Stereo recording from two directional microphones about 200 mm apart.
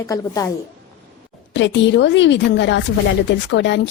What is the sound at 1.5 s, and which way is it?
Speech, 65° left (ahead or behind).